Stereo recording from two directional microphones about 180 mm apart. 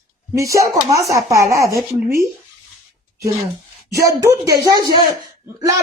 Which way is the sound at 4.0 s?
20° right (ahead or behind).